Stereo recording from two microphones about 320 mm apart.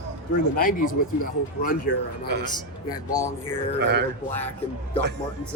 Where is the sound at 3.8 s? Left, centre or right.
Right.